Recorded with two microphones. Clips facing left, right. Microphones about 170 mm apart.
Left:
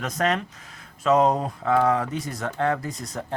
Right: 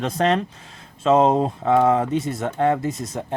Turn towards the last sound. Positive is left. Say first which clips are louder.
# right 5 dB
turn(degrees=-25)  # may be behind; listen again after turning